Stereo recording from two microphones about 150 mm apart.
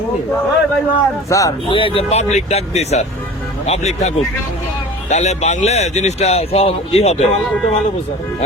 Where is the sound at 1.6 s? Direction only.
35° left (ahead or behind).